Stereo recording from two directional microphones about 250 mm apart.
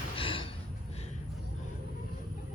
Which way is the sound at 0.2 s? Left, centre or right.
Left.